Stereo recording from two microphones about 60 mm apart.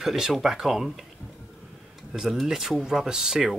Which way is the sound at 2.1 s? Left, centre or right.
Centre.